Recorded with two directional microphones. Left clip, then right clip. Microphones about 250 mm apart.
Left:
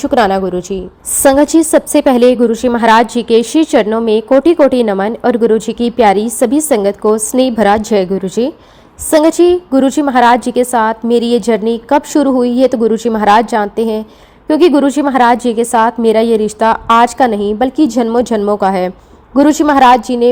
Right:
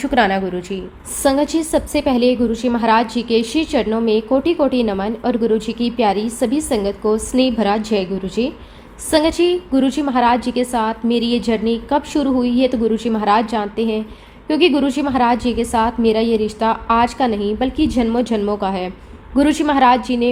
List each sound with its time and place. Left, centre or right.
0.0 s a woman's voice: left